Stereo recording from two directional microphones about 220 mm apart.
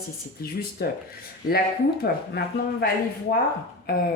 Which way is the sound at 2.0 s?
45° left (ahead or behind).